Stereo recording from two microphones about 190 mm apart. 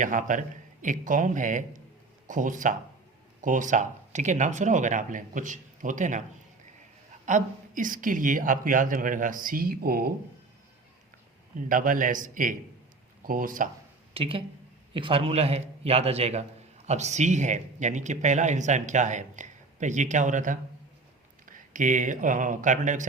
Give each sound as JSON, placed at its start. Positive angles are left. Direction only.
{"t": 0.0, "sound": "a woman's voice", "side_deg": -45}
{"t": 7.3, "sound": "a woman's voice", "side_deg": -45}
{"t": 11.7, "sound": "a woman's voice", "side_deg": -45}
{"t": 14.1, "sound": "speech", "side_deg": -30}